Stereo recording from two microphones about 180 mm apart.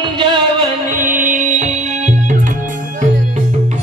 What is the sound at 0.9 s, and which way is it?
Music, 45° right (ahead or behind).